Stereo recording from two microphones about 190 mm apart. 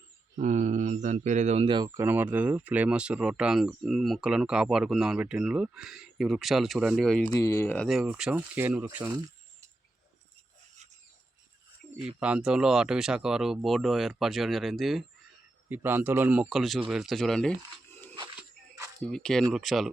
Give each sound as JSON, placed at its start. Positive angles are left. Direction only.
{"t": 0.3, "sound": "speech", "side_deg": -40}
{"t": 1.9, "sound": "speech", "side_deg": -10}
{"t": 7.3, "sound": "speech", "side_deg": 15}
{"t": 12.2, "sound": "speech", "side_deg": -5}
{"t": 15.7, "sound": "speech", "side_deg": -10}
{"t": 19.0, "sound": "speech", "side_deg": 5}